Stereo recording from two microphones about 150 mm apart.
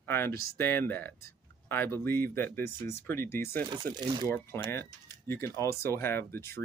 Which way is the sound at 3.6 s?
30° right (ahead or behind).